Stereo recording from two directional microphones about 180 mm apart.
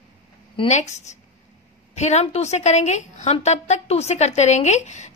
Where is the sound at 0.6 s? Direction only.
40° left (ahead or behind).